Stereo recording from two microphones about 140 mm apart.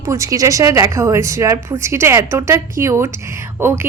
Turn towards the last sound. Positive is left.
turn(degrees=-15)  # may be behind; listen again after turning